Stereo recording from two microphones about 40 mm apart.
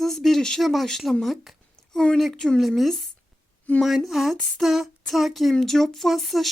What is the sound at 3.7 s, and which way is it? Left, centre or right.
Speech, left.